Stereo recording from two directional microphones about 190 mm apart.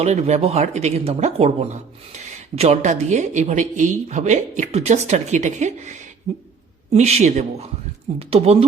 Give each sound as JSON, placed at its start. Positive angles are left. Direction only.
{"t": 0.0, "sound": "speech", "side_deg": -35}